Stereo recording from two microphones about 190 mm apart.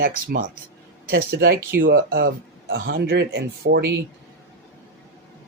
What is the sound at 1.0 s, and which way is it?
Speech, 55° right (ahead or behind).